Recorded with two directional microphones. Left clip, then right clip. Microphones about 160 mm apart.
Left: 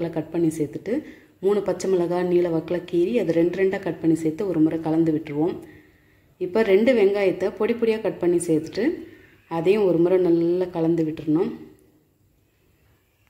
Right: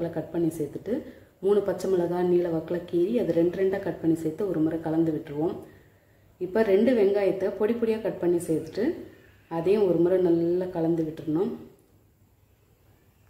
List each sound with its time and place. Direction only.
0.0 s speech: 15° left (ahead or behind)